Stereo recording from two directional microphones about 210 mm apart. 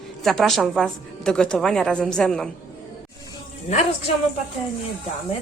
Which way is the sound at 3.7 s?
30° left (ahead or behind).